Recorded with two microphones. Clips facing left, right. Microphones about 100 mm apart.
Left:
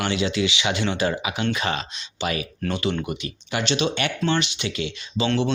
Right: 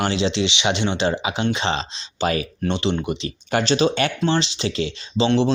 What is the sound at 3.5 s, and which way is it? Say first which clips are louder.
Speech: right 5 dB; 35° right (ahead or behind).